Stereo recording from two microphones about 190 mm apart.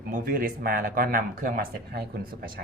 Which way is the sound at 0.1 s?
50° right (ahead or behind).